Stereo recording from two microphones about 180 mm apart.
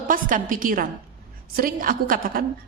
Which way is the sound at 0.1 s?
50° right (ahead or behind).